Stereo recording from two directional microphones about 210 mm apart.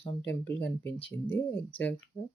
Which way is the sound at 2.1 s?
30° left (ahead or behind).